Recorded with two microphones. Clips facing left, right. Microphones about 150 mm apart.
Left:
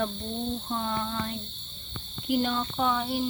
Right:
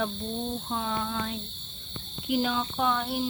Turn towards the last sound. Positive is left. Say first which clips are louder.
# even
turn(degrees=0)  # may be behind; listen again after turning